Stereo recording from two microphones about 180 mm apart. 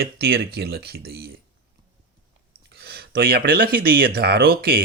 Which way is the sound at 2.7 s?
60° right (ahead or behind).